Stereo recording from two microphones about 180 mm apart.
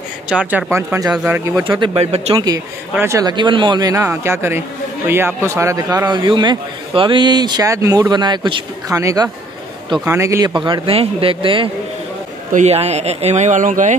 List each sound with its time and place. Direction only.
0.3 s speech: 5° right (ahead or behind)
1.1 s speech: 5° right (ahead or behind)
1.8 s speech: 35° right (ahead or behind)
2.9 s a man's voice: 15° right (ahead or behind); by 13.9 s 45° right (ahead or behind)